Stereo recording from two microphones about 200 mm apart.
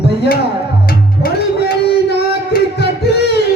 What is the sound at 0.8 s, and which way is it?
Music, 50° left (ahead or behind).